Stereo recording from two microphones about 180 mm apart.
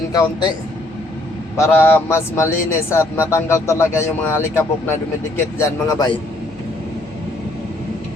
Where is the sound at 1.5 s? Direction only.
15° left (ahead or behind).